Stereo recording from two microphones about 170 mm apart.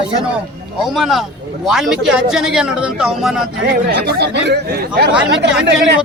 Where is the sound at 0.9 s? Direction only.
Centre (ahead or behind).